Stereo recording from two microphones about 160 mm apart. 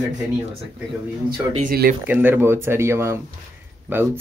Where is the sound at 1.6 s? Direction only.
60° right (ahead or behind).